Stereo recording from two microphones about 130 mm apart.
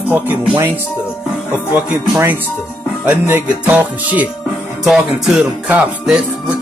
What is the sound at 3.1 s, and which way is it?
Music, 10° right (ahead or behind).